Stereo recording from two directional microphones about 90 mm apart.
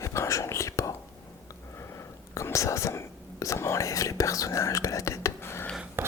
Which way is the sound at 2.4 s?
35° left (ahead or behind).